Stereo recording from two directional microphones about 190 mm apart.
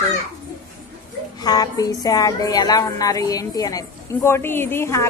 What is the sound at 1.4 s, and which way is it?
A woman's voice, 20° left (ahead or behind).